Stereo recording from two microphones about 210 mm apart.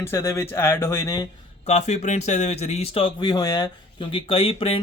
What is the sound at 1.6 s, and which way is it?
Speech, 35° left (ahead or behind).